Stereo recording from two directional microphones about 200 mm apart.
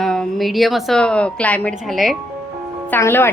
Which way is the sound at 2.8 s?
10° left (ahead or behind).